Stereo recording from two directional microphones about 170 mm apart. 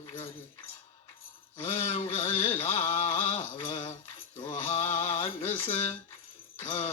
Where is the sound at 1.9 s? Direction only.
35° left (ahead or behind).